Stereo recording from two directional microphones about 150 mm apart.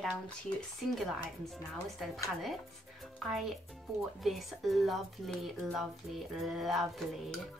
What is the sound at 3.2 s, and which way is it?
Speech, centre (ahead or behind).